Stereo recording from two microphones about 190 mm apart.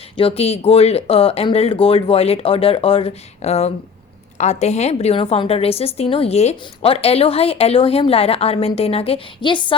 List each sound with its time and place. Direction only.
0.2 s a woman's voice: 30° left (ahead or behind)